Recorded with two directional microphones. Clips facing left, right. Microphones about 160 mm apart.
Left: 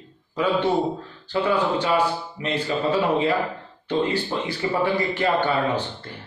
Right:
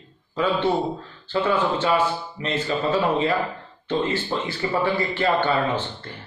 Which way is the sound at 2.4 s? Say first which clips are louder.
Even; 10° left (ahead or behind).